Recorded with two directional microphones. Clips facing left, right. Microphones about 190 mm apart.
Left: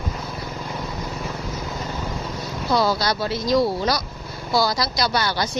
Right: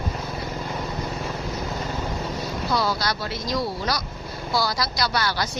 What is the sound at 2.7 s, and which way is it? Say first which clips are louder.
Speech: left 5 dB; 25° left (ahead or behind).